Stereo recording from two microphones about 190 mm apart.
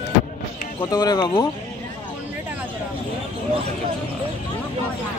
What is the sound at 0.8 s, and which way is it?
Speech, 20° left (ahead or behind).